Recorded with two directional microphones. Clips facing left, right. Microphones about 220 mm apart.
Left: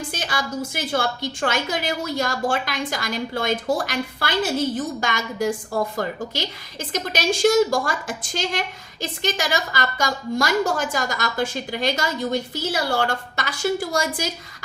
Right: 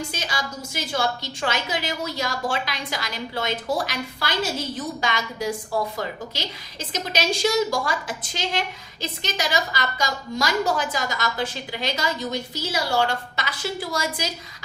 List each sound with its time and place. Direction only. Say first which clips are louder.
0.1 s a woman's voice: left 4 dB; 50° left (ahead or behind)